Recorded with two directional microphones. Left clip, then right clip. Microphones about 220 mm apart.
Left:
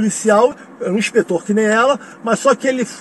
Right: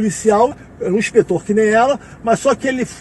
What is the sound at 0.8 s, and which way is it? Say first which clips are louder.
A man's voice: right 2 dB; 10° left (ahead or behind).